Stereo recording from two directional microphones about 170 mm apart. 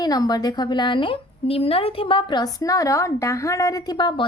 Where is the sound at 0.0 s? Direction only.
25° left (ahead or behind).